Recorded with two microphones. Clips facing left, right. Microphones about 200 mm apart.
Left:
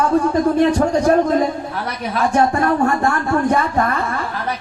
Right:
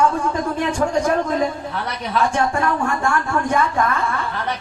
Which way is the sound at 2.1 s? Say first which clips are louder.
Left 3 dB; 40° left (ahead or behind).